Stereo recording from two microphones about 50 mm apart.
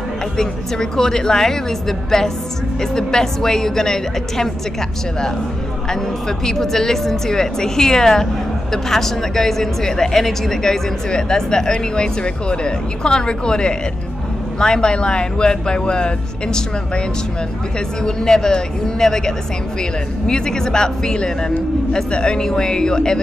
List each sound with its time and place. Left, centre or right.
0.4 s speech: centre
5.9 s speech: centre